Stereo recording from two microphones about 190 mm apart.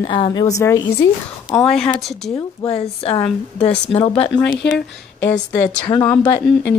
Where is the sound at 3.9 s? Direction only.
30° left (ahead or behind).